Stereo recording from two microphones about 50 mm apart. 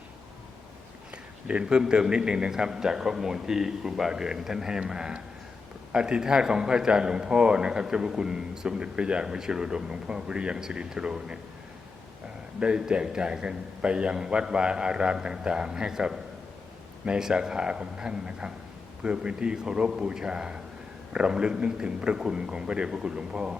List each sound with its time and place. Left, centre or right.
1.5 s a man's voice: right
12.5 s a man's voice: centre